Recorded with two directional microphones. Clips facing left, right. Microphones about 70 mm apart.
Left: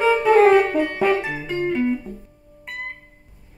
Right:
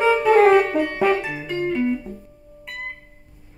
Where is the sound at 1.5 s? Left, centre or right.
Left.